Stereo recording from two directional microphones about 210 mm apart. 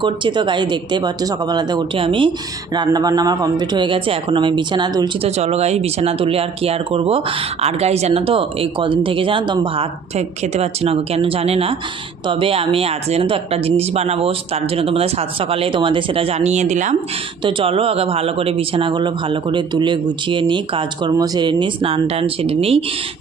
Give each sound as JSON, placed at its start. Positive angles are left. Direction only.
{"t": 0.0, "sound": "speech", "side_deg": -20}